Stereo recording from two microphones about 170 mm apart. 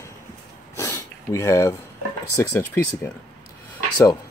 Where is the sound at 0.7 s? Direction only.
15° left (ahead or behind).